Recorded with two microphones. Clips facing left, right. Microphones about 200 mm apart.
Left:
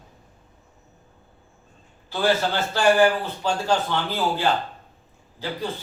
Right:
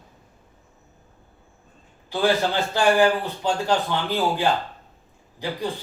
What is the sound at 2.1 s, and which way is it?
A man's voice, 15° right (ahead or behind).